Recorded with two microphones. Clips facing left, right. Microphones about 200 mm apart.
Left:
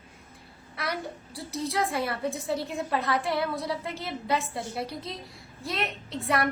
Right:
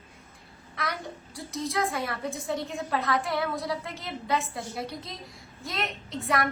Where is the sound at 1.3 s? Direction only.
35° left (ahead or behind).